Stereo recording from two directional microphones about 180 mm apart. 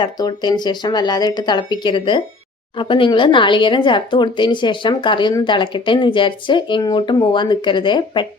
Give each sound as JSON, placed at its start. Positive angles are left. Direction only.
{"t": 0.0, "sound": "speech", "side_deg": 25}